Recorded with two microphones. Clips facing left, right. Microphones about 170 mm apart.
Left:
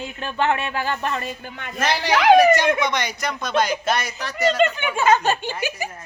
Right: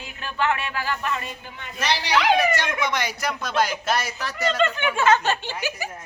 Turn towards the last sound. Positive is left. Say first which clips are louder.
# left 3 dB
turn(degrees=15)  # may be behind; listen again after turning